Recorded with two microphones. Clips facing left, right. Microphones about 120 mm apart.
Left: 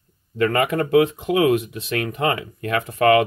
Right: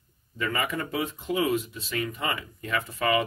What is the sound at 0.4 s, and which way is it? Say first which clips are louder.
Speech: left 10 dB; 65° left (ahead or behind).